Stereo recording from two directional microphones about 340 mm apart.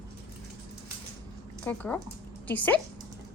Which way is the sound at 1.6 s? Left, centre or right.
Centre.